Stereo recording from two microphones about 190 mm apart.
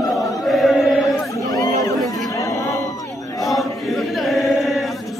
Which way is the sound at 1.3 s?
20° left (ahead or behind).